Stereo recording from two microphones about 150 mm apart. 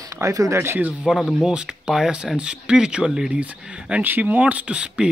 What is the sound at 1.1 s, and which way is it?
A man's voice, centre (ahead or behind).